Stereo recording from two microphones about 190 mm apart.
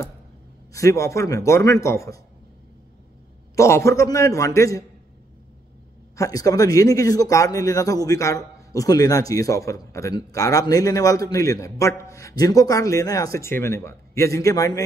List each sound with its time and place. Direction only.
0.7 s speech: 15° left (ahead or behind)
3.5 s speech: 15° left (ahead or behind)
6.1 s speech: 15° left (ahead or behind)